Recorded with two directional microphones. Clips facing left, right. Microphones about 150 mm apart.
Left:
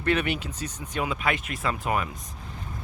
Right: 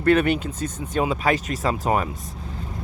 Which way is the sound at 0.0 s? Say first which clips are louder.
Right 7 dB; 45° right (ahead or behind).